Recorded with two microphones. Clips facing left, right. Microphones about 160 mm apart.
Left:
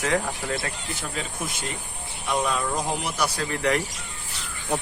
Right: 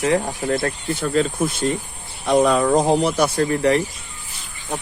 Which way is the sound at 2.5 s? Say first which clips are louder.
Right 10 dB; 65° right (ahead or behind).